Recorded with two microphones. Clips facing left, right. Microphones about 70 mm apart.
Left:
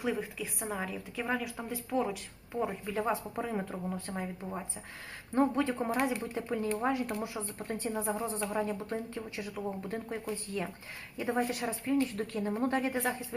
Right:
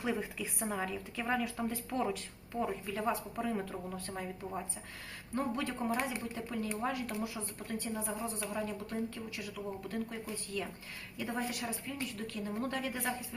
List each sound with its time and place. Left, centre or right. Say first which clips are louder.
0.0 s a woman's voice: left 2 dB; centre
2.6 s speech: left 3 dB; centre
5.3 s speech: left 7 dB; left
11.2 s speech: left 6 dB; left